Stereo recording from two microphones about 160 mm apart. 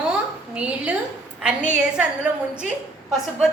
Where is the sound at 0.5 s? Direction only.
5° right (ahead or behind).